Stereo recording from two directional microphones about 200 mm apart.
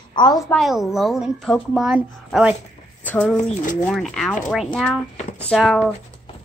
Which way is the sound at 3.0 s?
5° left (ahead or behind).